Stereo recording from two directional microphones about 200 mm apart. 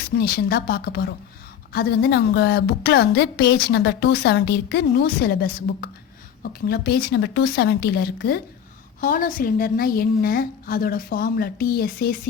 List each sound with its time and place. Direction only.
0.2 s a woman's voice: 50° left (ahead or behind)
9.0 s a woman's voice: 40° left (ahead or behind)